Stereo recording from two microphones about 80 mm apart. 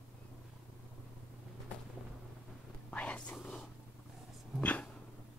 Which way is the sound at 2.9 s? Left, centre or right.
Centre.